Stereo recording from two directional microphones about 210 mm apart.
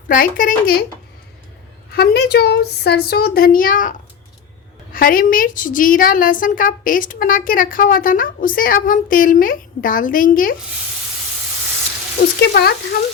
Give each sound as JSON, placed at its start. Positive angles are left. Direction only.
{"t": 0.1, "sound": "a woman's voice", "side_deg": 40}
{"t": 1.9, "sound": "a woman's voice", "side_deg": 50}
{"t": 12.4, "sound": "speech", "side_deg": 50}